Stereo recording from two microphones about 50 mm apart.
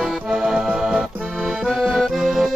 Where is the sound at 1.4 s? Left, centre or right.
Centre.